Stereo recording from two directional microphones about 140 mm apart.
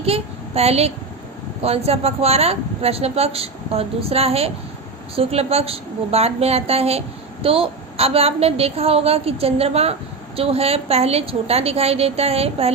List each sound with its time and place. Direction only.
0.0 s a woman's voice: 45° right (ahead or behind)